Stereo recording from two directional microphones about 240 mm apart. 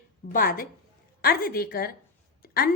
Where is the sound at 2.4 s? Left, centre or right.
Left.